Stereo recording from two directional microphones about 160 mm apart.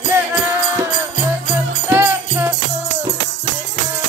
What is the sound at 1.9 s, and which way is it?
Music, 15° right (ahead or behind).